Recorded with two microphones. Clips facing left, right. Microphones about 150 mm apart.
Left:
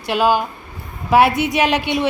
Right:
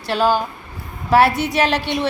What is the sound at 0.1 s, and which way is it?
A woman's voice, 15° left (ahead or behind).